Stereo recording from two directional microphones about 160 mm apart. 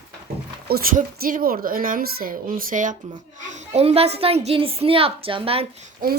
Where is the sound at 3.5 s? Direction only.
40° right (ahead or behind).